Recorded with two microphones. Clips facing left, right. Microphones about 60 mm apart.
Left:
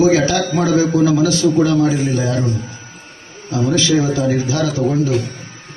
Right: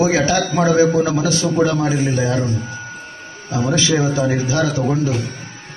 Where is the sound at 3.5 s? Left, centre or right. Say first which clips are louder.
Left 2 dB; right.